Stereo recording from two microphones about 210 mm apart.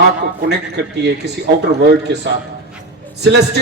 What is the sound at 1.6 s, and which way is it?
Speech, 55° right (ahead or behind).